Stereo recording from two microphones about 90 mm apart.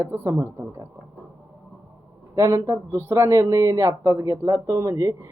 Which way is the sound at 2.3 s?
35° right (ahead or behind).